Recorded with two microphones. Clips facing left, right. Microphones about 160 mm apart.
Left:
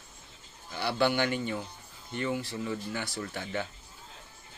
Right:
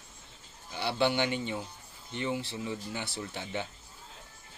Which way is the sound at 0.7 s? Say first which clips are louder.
Left 1 dB; 20° right (ahead or behind).